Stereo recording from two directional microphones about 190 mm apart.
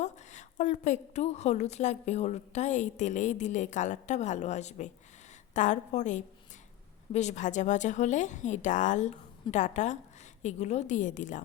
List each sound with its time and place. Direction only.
0.0 s a woman's voice: 40° left (ahead or behind)